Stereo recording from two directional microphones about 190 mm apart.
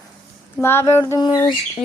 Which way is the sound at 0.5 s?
15° left (ahead or behind).